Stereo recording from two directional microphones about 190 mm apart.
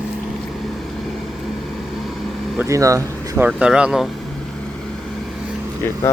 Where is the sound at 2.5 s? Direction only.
15° right (ahead or behind).